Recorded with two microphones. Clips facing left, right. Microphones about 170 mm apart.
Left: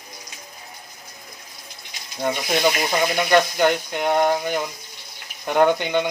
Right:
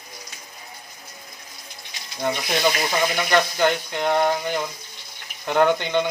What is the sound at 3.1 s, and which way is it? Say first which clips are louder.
Speech: left 3 dB; 15° left (ahead or behind).